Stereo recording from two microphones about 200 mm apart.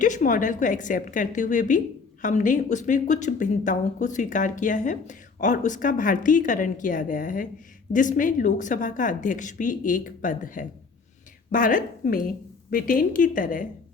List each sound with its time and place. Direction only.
0.0 s speech: 40° left (ahead or behind)